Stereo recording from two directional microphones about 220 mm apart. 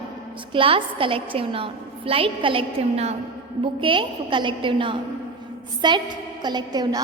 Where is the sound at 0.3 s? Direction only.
25° right (ahead or behind).